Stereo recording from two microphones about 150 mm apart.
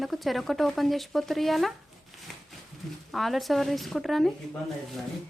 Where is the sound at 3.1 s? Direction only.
Centre (ahead or behind).